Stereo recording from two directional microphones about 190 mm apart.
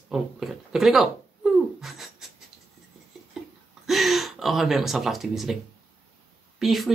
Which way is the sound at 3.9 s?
Centre (ahead or behind).